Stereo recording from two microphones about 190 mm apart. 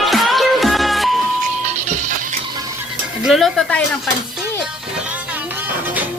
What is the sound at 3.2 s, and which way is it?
Speech, centre (ahead or behind).